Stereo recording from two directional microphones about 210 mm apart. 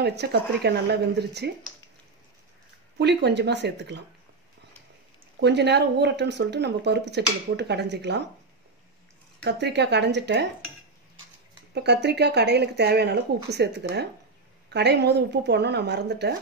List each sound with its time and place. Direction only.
0.0 s speech: 50° right (ahead or behind)
3.0 s speech: 55° right (ahead or behind)
5.4 s speech: 55° right (ahead or behind)
9.4 s speech: 55° right (ahead or behind)
11.7 s speech: 50° right (ahead or behind)